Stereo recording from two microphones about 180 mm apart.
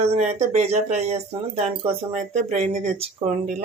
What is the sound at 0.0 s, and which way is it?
Speech, 35° right (ahead or behind).